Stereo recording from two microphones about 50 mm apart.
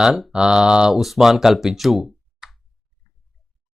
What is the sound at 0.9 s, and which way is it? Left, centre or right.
Speech, centre.